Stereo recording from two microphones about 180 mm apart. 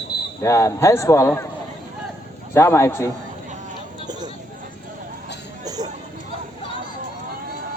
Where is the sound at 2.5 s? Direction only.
15° left (ahead or behind).